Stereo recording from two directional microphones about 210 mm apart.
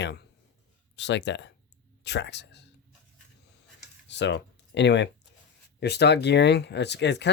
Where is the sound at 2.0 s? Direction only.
55° left (ahead or behind).